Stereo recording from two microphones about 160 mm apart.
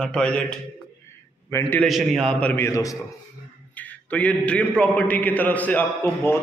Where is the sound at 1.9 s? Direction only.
Centre (ahead or behind).